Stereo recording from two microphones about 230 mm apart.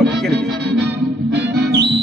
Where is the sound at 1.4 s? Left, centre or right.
Right.